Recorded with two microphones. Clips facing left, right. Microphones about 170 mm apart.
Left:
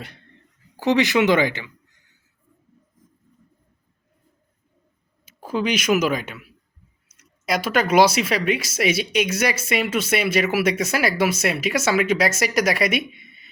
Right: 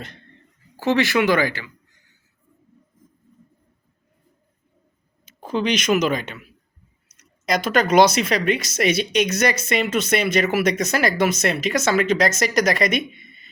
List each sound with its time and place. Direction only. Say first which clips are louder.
0.8 s speech: left 1 dB; 15° left (ahead or behind)
5.2 s speech: right 1 dB; 5° left (ahead or behind)
7.4 s speech: right 1 dB; 5° left (ahead or behind)